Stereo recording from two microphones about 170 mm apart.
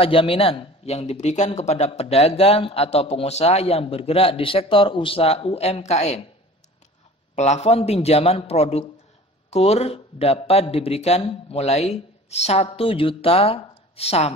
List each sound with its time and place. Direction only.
0.0 s speech: 35° left (ahead or behind)
7.3 s speech: 40° left (ahead or behind)